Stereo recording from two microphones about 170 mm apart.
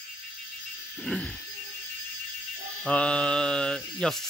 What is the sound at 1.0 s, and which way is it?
Speech, 5° left (ahead or behind).